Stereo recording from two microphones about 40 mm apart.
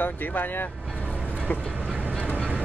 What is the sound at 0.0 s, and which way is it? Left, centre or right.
Speech, left.